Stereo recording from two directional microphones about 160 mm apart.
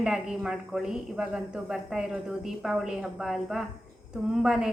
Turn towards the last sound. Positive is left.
turn(degrees=-5)  # may be behind; listen again after turning